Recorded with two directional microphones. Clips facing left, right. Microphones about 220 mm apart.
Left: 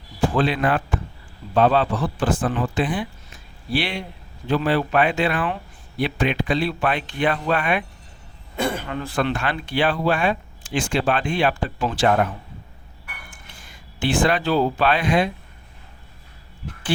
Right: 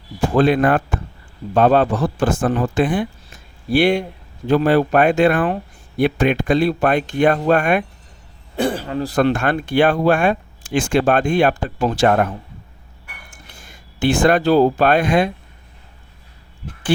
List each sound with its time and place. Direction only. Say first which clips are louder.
0.3 s speech: right 8 dB; 50° right (ahead or behind)
8.5 s speech: right 5 dB; 35° right (ahead or behind)
13.3 s speech: right 2 dB; 45° right (ahead or behind)